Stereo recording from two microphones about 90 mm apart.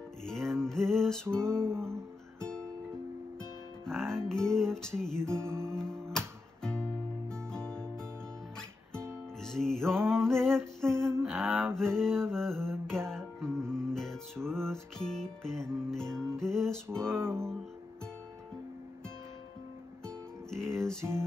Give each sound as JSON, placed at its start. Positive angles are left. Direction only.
{"t": 0.2, "sound": "music", "side_deg": 5}
{"t": 3.8, "sound": "music", "side_deg": 5}
{"t": 5.3, "sound": "music", "side_deg": -30}
{"t": 5.7, "sound": "music", "side_deg": 5}
{"t": 9.4, "sound": "music", "side_deg": 5}
{"t": 10.2, "sound": "female singing", "side_deg": 5}
{"t": 10.8, "sound": "a sound", "side_deg": 5}
{"t": 11.2, "sound": "a sound", "side_deg": -5}
{"t": 11.7, "sound": "mantra", "side_deg": 5}
{"t": 13.1, "sound": "music", "side_deg": 5}
{"t": 20.1, "sound": "music", "side_deg": 5}